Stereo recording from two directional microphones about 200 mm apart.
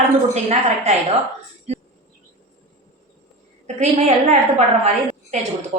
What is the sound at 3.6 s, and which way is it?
Speech, 35° right (ahead or behind).